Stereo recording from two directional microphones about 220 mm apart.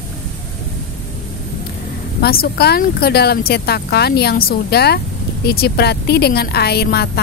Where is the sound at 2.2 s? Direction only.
45° left (ahead or behind).